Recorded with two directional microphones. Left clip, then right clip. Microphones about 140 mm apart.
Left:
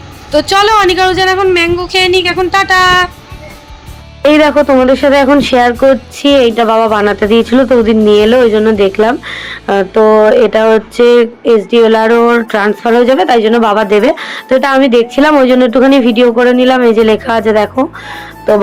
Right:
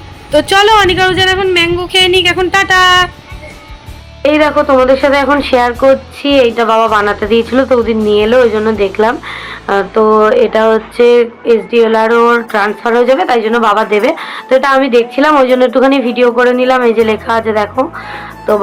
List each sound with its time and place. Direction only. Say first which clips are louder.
0.3 s speech: right 1 dB; 10° right (ahead or behind)
4.2 s speech: left 2 dB; 90° left; by 7.9 s 55° left (ahead or behind)
8.0 s speech: left 1 dB; 90° left; by 10.0 s 65° left (ahead or behind)
10.2 s speech: left 2 dB; 80° left